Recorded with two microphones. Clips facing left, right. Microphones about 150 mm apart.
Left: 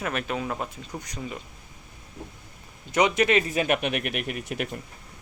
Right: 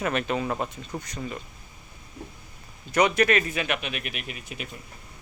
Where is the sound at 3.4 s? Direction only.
40° left (ahead or behind); by 4.8 s 65° left (ahead or behind).